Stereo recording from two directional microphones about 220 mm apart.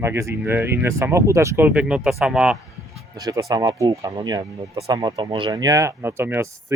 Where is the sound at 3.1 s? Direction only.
15° right (ahead or behind).